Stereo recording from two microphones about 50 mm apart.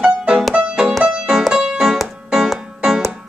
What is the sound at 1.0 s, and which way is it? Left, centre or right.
Music, centre.